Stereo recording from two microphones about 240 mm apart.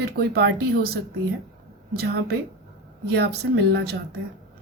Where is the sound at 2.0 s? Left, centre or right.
Right.